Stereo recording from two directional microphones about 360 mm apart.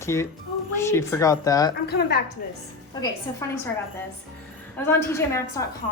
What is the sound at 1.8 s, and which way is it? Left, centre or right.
Speech, left.